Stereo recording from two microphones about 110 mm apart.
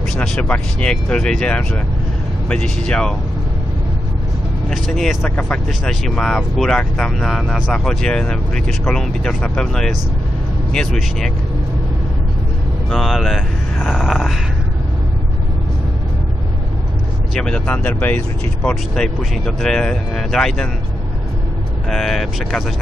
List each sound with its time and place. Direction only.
0.1 s speech: 5° left (ahead or behind)
4.6 s speech: 5° left (ahead or behind)
5.3 s speech: 15° left (ahead or behind)
5.7 s speech: centre (ahead or behind)
12.9 s speech: centre (ahead or behind)
17.3 s speech: 5° left (ahead or behind)
21.8 s speech: 5° left (ahead or behind)